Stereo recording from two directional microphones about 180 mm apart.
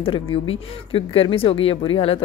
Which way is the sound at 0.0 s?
30° left (ahead or behind).